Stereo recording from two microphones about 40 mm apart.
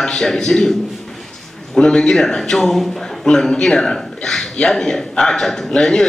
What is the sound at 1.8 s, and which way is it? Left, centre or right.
A man's voice, centre.